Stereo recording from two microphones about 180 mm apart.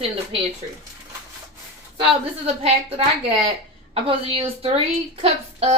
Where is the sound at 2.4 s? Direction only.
35° right (ahead or behind).